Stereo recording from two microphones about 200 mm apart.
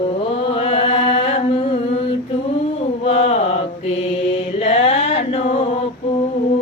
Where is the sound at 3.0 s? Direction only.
30° left (ahead or behind).